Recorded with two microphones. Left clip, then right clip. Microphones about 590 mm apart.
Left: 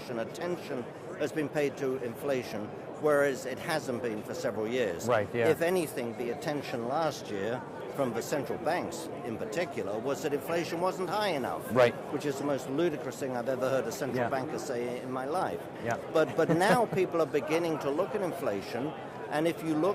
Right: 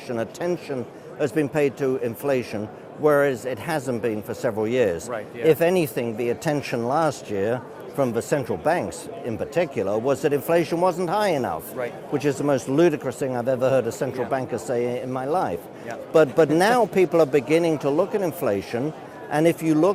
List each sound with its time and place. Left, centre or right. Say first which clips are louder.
0.2 s speech: right 8 dB; right